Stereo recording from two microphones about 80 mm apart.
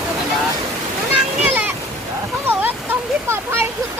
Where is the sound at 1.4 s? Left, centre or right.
Right.